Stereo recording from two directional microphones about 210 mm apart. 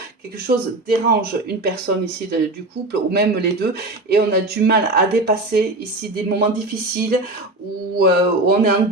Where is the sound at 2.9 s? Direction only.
50° right (ahead or behind).